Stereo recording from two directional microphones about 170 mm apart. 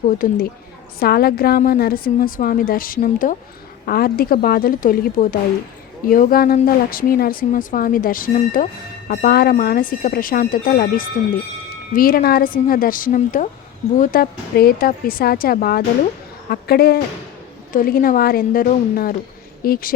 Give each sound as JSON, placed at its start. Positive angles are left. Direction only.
{"t": 0.2, "sound": "a woman's voice", "side_deg": 55}
{"t": 0.9, "sound": "a woman's voice", "side_deg": 65}